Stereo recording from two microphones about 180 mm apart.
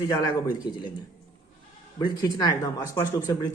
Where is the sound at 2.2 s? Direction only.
20° left (ahead or behind).